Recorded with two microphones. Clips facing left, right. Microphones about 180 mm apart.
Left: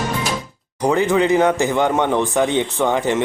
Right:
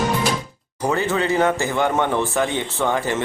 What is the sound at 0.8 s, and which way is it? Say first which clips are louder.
A man's voice: left 5 dB; 15° left (ahead or behind).